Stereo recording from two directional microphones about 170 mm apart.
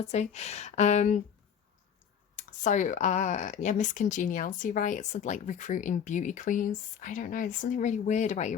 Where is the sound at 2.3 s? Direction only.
45° left (ahead or behind).